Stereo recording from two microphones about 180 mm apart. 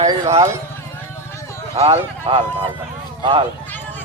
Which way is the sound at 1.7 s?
35° right (ahead or behind).